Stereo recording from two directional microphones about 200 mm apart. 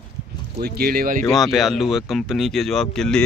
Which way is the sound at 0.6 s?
50° right (ahead or behind).